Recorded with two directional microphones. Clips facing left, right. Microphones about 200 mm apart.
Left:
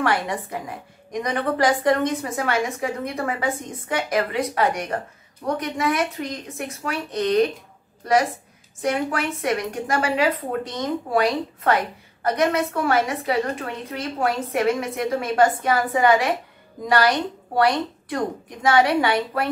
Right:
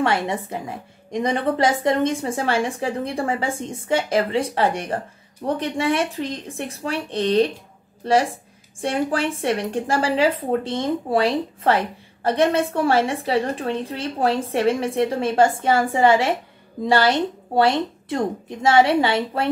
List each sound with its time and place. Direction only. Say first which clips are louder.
0.0 s speech: right 2 dB; 25° right (ahead or behind)